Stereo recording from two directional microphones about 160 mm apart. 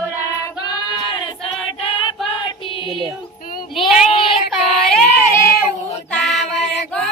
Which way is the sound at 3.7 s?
Centre (ahead or behind).